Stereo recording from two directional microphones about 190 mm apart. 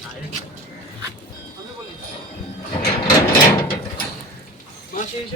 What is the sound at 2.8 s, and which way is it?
Sewing machine, 20° left (ahead or behind).